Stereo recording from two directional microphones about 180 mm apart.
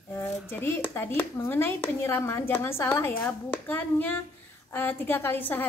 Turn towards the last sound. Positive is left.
turn(degrees=10)  # may be behind; listen again after turning